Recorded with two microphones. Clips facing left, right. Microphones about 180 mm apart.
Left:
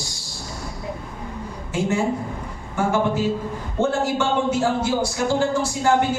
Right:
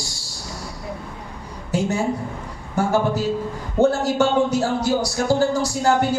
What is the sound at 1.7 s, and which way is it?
Speech, 40° right (ahead or behind).